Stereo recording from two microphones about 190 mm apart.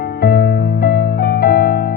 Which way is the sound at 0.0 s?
55° left (ahead or behind).